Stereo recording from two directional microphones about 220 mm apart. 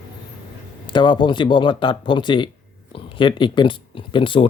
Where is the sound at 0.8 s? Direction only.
20° left (ahead or behind).